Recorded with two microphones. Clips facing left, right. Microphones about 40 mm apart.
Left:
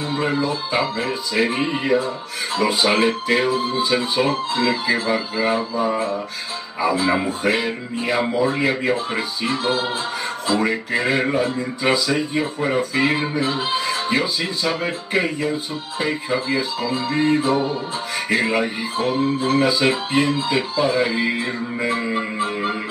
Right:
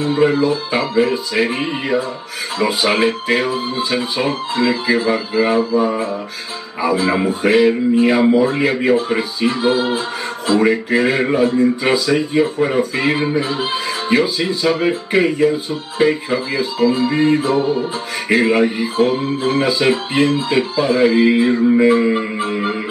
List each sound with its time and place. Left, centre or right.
0.0 s speech: centre
0.9 s speech: centre
19.7 s speech: centre